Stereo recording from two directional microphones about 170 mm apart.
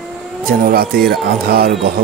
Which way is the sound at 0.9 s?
Centre (ahead or behind).